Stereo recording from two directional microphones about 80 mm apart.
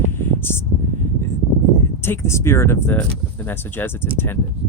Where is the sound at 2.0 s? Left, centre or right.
Left.